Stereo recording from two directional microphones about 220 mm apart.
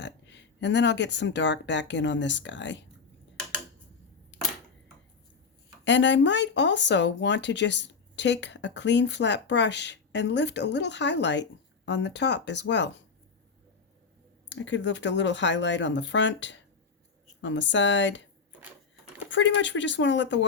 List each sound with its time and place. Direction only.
0.0 s speech: 55° left (ahead or behind)
5.8 s speech: 55° left (ahead or behind)
14.5 s speech: 55° left (ahead or behind)
19.3 s speech: 55° left (ahead or behind)